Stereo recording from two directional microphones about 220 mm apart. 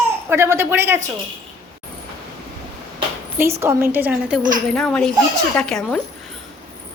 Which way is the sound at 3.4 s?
10° right (ahead or behind).